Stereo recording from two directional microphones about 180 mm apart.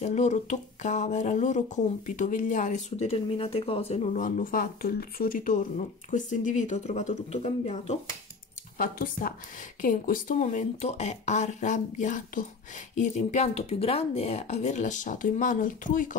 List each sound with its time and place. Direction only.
0.0 s speech: 40° left (ahead or behind)
8.7 s speech: 50° left (ahead or behind)